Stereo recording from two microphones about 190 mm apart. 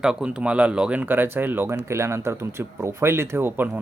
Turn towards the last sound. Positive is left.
turn(degrees=-10)  # may be behind; listen again after turning